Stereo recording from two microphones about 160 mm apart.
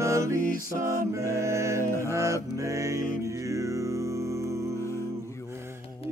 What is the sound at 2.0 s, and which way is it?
Mantra, 20° right (ahead or behind).